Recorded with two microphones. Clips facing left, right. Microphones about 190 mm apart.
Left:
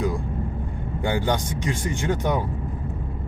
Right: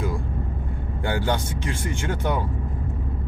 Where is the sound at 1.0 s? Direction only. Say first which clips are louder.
Left 1 dB; 15° left (ahead or behind).